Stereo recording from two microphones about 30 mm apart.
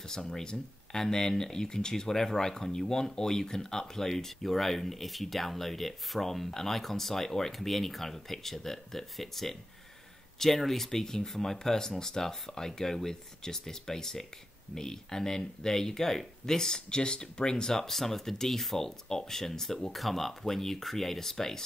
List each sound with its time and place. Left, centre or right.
0.0 s speech: centre
17.8 s speech: centre
19.9 s speech: centre